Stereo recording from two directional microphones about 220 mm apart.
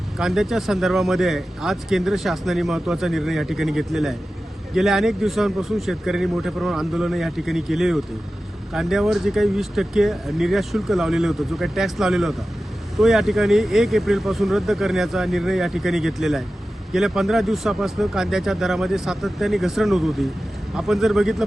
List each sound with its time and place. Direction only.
0.2 s speech: centre (ahead or behind)